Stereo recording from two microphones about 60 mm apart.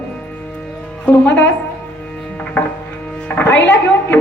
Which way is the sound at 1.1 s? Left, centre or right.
Left.